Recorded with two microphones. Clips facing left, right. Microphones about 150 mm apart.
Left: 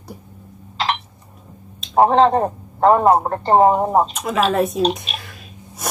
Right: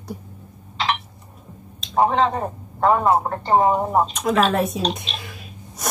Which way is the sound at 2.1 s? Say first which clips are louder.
Left 6 dB; 40° left (ahead or behind).